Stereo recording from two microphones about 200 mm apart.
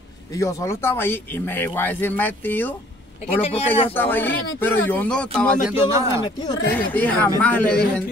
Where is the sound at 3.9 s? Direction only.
10° left (ahead or behind).